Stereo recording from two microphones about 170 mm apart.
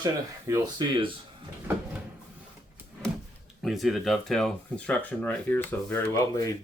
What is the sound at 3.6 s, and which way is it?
Speech, centre (ahead or behind).